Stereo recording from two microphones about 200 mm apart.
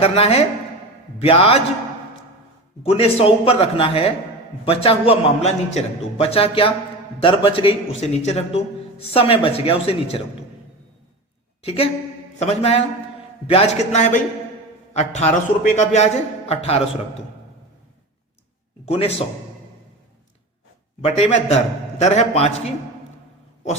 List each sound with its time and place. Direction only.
0.0 s a man's voice: 30° left (ahead or behind)
2.8 s a man's voice: 30° left (ahead or behind)
11.6 s a woman's voice: 30° left (ahead or behind)
18.9 s a man's voice: 30° left (ahead or behind)
21.0 s a man's voice: 30° left (ahead or behind)